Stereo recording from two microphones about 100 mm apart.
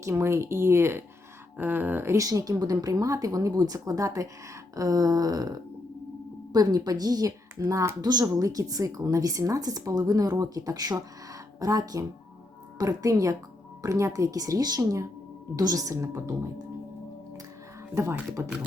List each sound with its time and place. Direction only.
0.0 s speech: 30° right (ahead or behind)
7.6 s speech: 30° right (ahead or behind)
17.9 s speech: 30° right (ahead or behind)